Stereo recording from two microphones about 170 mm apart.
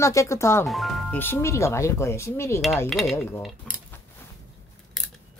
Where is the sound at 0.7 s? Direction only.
Centre (ahead or behind).